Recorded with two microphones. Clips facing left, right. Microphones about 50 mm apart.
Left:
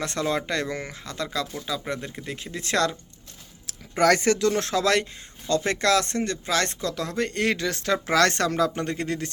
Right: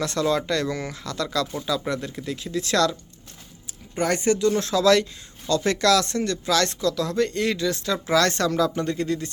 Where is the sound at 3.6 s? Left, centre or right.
Left.